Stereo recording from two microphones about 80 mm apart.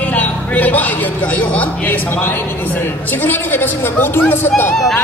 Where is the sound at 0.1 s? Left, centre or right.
Left.